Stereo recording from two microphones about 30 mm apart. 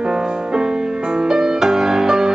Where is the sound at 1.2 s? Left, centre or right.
Right.